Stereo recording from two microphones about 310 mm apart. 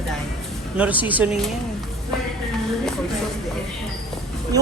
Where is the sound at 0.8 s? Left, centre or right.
Centre.